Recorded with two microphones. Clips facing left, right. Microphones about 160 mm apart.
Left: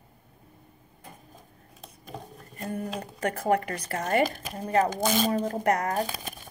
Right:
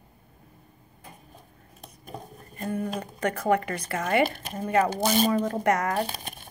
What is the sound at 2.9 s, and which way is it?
Speech, 40° left (ahead or behind).